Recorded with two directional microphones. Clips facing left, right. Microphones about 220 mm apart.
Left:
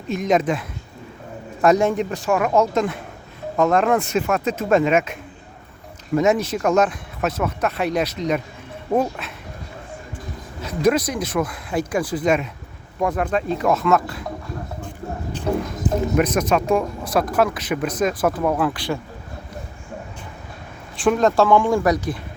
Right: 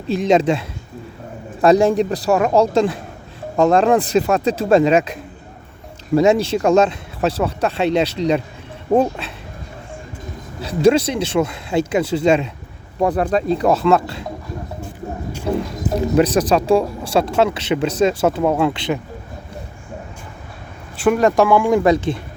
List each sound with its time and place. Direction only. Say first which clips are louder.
0.1 s speech: right 4 dB; 30° right (ahead or behind)
1.6 s speech: right 4 dB; 30° right (ahead or behind)
10.6 s speech: right 5 dB; 30° right (ahead or behind)
15.5 s music: right 2 dB; 10° right (ahead or behind)
16.1 s speech: right 6 dB; 30° right (ahead or behind)
21.0 s speech: right 2 dB; 10° right (ahead or behind)
21.8 s speech: right 4 dB; 25° right (ahead or behind)